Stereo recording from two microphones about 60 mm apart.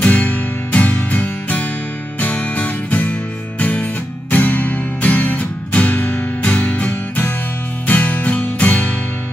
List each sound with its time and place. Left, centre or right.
0.0 s music: left